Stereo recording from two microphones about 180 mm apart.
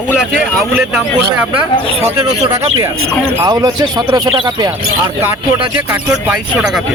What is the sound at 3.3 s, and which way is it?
Speech, 20° right (ahead or behind).